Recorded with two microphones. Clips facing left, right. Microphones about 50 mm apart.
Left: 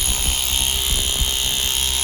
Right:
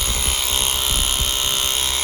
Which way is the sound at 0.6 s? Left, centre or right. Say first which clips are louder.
Right 1 dB; right.